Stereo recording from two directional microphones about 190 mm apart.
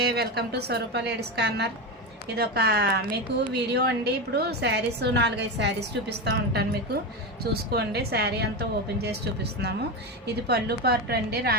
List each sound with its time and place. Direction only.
0.0 s a woman's voice: 60° right (ahead or behind)